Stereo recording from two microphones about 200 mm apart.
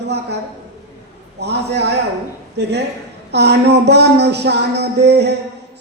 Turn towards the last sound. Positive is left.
turn(degrees=-55)  # may be behind; listen again after turning